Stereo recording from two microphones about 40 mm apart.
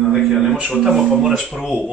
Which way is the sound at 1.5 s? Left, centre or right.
Centre.